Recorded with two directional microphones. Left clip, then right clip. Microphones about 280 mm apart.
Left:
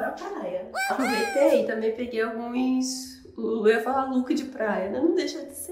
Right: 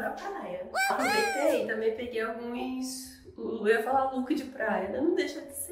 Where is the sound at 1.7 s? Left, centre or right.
Left.